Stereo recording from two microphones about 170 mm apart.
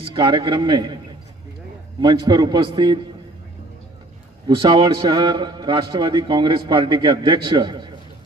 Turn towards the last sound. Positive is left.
turn(degrees=-25)  # may be behind; listen again after turning